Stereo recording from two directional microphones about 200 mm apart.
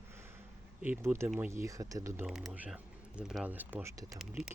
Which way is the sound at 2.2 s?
Centre (ahead or behind).